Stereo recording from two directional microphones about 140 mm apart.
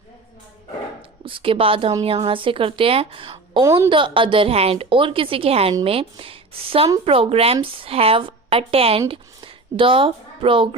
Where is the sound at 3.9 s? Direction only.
35° right (ahead or behind).